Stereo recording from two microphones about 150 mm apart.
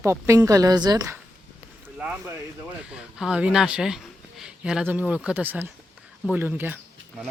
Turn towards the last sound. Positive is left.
turn(degrees=-15)  # may be behind; listen again after turning